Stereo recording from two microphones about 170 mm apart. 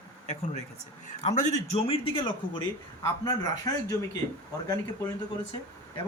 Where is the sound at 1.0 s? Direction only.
45° left (ahead or behind).